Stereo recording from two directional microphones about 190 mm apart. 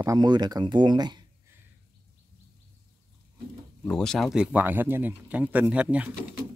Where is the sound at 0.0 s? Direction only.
20° right (ahead or behind).